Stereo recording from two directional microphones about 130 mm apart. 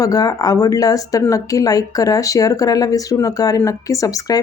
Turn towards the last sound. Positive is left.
turn(degrees=25)  # may be behind; listen again after turning